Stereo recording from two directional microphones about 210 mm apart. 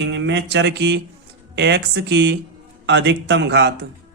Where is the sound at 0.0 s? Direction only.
60° right (ahead or behind).